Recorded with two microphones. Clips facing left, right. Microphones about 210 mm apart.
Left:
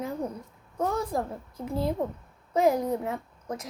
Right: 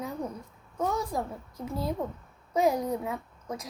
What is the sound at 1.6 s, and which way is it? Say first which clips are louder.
Speech: left 3 dB; 30° left (ahead or behind).